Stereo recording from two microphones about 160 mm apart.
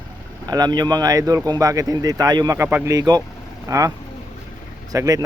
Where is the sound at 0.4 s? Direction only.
25° right (ahead or behind).